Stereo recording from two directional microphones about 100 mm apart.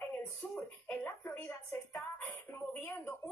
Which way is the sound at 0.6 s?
15° left (ahead or behind).